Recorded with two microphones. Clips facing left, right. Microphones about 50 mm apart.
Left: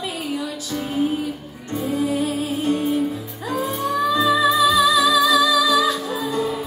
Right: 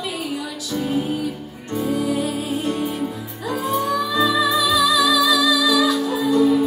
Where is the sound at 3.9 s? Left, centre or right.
Left.